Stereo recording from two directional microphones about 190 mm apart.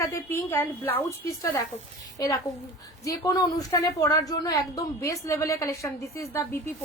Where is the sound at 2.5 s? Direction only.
20° left (ahead or behind).